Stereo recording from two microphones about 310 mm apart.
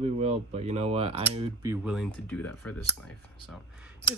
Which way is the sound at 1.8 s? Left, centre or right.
Centre.